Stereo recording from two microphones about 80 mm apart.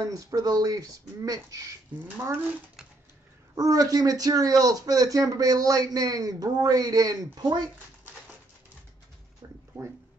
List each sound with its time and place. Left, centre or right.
0.0 s speech: right
3.5 s speech: right